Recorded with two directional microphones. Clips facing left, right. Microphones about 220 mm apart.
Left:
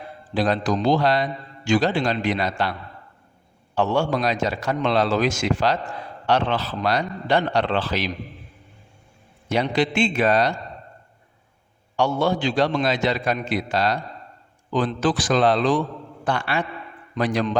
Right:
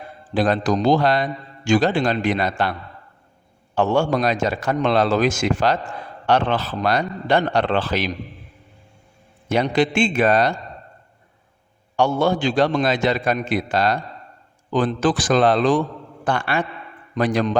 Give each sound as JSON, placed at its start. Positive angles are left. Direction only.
{"t": 0.3, "sound": "a man's voice", "side_deg": -50}
{"t": 3.8, "sound": "a man's voice", "side_deg": -50}
{"t": 9.5, "sound": "a man's voice", "side_deg": -50}
{"t": 11.9, "sound": "a man's voice", "side_deg": -50}